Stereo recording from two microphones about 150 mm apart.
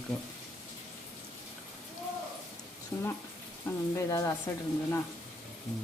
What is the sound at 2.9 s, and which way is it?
A woman's voice, 10° left (ahead or behind).